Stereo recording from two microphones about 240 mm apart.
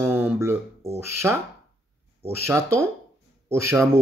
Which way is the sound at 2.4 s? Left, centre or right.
Centre.